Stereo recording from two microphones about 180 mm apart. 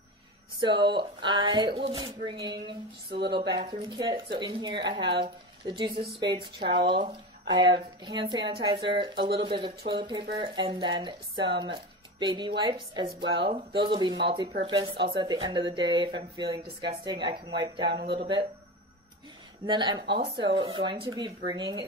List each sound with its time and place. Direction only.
0.6 s speech: 25° right (ahead or behind)
3.1 s speech: 75° right (ahead or behind)
3.5 s speech: 25° right (ahead or behind)
19.6 s speech: 25° right (ahead or behind)